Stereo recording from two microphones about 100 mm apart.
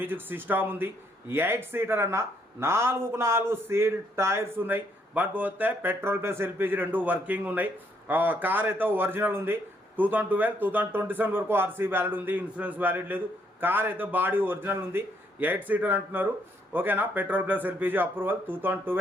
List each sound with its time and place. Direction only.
0.0 s speech: 20° right (ahead or behind)